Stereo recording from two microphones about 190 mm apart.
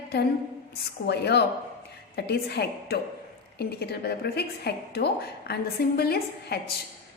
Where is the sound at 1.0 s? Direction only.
60° left (ahead or behind).